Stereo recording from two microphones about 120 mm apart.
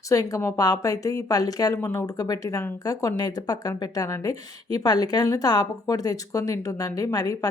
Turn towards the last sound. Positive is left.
turn(degrees=30)  # may be behind; listen again after turning